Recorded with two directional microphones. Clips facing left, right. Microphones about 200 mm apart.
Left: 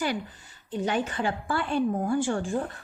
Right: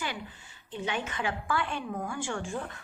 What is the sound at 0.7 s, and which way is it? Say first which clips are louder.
A woman's voice: left 6 dB; 40° left (ahead or behind).